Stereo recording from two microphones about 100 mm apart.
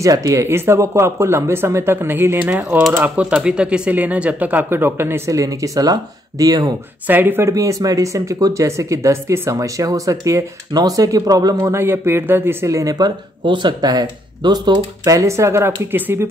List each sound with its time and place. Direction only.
0.0 s speech: 35° right (ahead or behind)
7.1 s speech: 20° right (ahead or behind)
7.5 s speech: 35° right (ahead or behind)
11.8 s speech: 25° right (ahead or behind); by 15.1 s 45° right (ahead or behind)
15.1 s speech: 30° right (ahead or behind)